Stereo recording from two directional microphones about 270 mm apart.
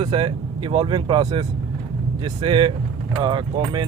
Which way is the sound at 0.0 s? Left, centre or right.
Centre.